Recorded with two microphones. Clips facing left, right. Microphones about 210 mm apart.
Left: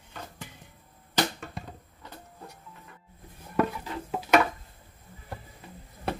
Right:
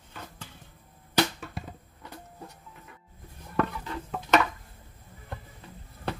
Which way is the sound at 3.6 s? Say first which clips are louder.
Left 2 dB; 10° left (ahead or behind).